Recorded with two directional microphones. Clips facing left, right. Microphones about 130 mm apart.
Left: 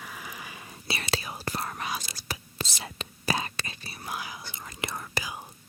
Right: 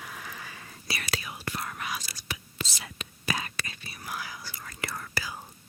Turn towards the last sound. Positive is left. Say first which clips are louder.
# left 1 dB
turn(degrees=15)  # may be behind; listen again after turning